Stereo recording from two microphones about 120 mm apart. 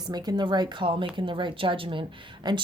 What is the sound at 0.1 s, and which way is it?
Speech, 35° right (ahead or behind).